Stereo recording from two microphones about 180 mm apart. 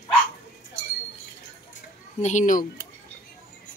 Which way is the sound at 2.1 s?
40° left (ahead or behind).